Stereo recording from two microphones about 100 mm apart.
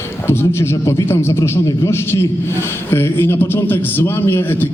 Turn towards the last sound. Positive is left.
turn(degrees=20)  # may be behind; listen again after turning